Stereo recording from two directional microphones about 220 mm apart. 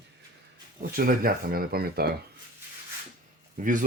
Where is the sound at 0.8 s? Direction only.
45° right (ahead or behind).